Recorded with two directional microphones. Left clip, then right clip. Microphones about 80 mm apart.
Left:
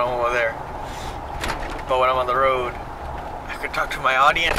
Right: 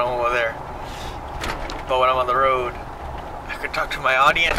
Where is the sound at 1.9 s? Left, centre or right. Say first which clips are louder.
Right 1 dB; centre.